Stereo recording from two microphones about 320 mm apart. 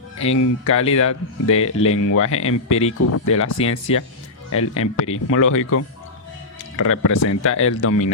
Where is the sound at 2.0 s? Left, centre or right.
Left.